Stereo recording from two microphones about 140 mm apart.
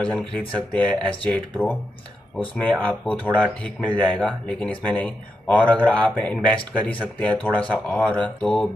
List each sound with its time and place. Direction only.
0.0 s speech: 10° left (ahead or behind)